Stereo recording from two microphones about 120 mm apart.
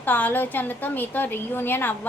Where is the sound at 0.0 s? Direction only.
15° left (ahead or behind).